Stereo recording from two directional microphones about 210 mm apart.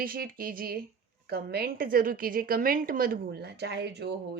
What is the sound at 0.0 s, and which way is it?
Speech, 45° right (ahead or behind).